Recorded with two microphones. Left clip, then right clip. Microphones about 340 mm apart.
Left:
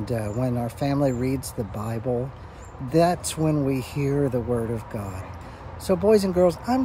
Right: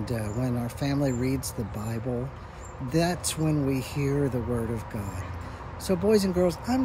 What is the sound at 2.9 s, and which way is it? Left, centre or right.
Speech, centre.